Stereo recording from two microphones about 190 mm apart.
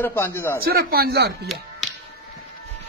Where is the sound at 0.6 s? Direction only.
55° right (ahead or behind).